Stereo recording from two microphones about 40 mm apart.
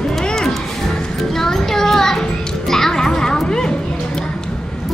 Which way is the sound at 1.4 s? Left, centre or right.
Centre.